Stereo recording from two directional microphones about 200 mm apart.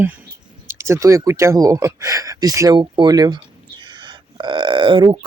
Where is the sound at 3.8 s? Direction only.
20° right (ahead or behind).